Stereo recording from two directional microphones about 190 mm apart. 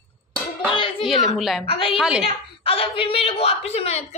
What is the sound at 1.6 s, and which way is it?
Speech, 30° left (ahead or behind).